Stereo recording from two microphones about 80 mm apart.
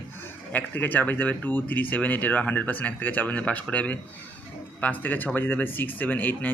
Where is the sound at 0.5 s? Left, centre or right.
Left.